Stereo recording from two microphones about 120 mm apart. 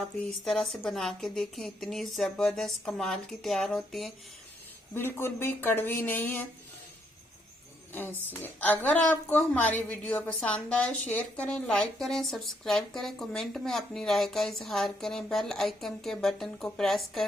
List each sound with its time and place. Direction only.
0.0 s a woman's voice: 5° left (ahead or behind)
4.9 s speech: 20° left (ahead or behind)
8.3 s a woman's voice: 15° left (ahead or behind)